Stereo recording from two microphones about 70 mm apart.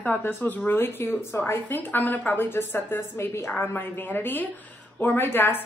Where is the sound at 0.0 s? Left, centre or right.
Left.